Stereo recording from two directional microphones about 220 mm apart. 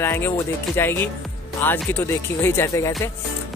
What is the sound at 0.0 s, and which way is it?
Speech, 10° left (ahead or behind).